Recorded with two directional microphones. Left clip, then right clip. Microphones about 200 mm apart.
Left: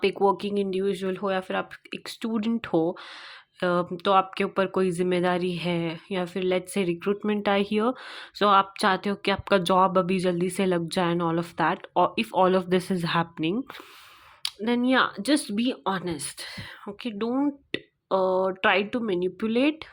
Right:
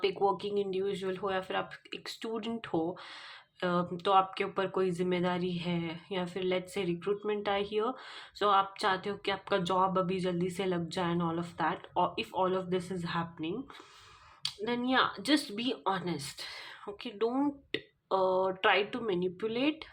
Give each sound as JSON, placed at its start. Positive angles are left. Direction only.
{"t": 0.0, "sound": "speech", "side_deg": 35}